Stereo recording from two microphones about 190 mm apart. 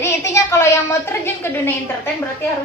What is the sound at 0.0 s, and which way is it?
A woman's voice, 15° left (ahead or behind).